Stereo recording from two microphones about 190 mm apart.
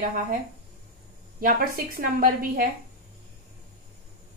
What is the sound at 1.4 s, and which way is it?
A woman's voice, 50° right (ahead or behind).